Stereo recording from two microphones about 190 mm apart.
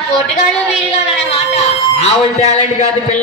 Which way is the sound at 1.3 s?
35° left (ahead or behind).